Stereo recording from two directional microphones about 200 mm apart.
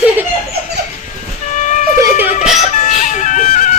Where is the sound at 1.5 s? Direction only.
40° left (ahead or behind).